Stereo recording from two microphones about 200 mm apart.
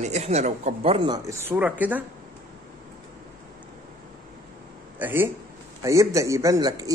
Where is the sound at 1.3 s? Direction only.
10° right (ahead or behind).